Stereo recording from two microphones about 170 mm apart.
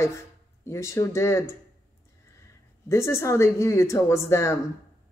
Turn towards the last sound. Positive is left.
turn(degrees=15)  # may be behind; listen again after turning